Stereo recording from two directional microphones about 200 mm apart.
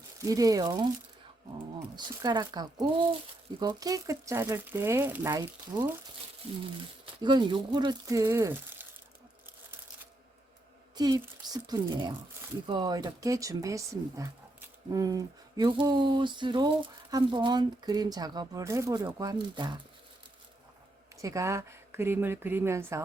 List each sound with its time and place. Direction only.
0.2 s speech: 15° right (ahead or behind)
2.0 s speech: 20° right (ahead or behind)
7.0 s speech: 20° right (ahead or behind)
10.9 s speech: 20° right (ahead or behind)
21.2 s speech: 15° right (ahead or behind)